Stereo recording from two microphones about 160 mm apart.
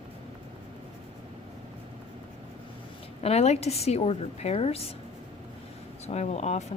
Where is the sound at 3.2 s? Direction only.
40° left (ahead or behind).